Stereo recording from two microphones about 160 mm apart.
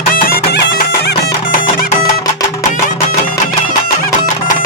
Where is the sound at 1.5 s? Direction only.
65° left (ahead or behind).